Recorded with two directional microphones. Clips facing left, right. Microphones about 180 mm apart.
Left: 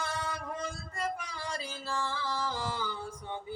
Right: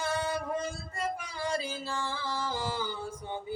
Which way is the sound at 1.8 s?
25° right (ahead or behind).